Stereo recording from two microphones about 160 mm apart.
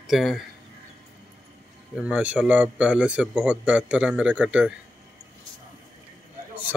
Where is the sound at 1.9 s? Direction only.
5° right (ahead or behind).